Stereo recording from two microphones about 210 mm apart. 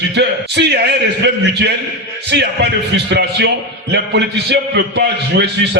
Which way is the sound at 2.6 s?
55° right (ahead or behind).